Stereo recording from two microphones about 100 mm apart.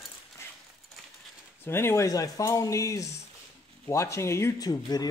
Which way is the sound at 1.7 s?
25° left (ahead or behind).